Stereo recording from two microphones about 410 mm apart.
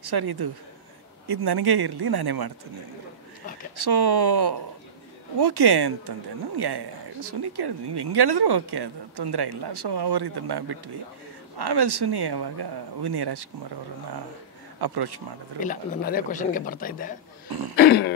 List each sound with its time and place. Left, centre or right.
0.0 s speech: right
3.7 s speech: right
14.8 s speech: right
15.6 s speech: centre
17.5 s throat clearing: right
17.7 s speech: left